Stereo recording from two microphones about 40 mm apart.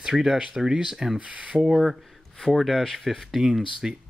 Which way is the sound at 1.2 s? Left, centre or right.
Right.